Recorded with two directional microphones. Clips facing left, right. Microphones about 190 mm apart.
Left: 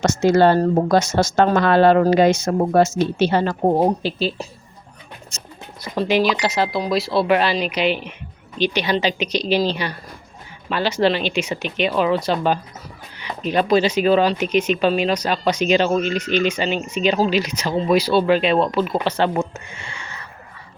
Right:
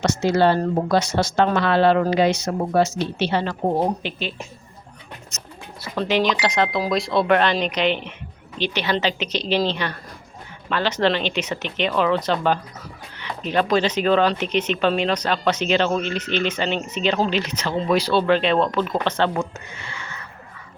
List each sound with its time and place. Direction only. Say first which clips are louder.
0.0 s speech: left 3 dB; 45° left (ahead or behind); by 5.5 s 30° left (ahead or behind)
5.8 s speech: left 2 dB; 15° left (ahead or behind)
19.4 s a sound: left 3 dB; 25° left (ahead or behind)